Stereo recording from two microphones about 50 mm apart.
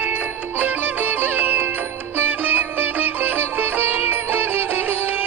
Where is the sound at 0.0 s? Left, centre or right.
Right.